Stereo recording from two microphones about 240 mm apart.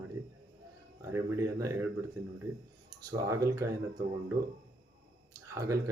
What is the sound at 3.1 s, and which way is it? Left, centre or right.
Speech, centre.